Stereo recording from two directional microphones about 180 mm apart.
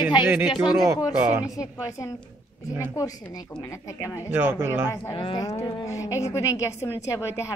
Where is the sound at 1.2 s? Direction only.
10° right (ahead or behind).